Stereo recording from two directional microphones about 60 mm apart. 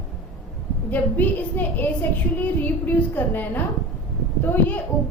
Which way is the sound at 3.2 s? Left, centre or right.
Left.